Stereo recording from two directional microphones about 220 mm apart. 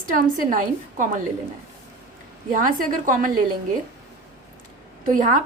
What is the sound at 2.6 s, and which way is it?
Speech, 40° right (ahead or behind).